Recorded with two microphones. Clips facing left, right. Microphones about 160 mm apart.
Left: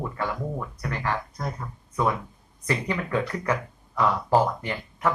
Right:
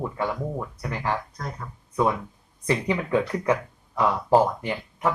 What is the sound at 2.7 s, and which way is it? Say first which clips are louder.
Speech: right 3 dB; 20° right (ahead or behind).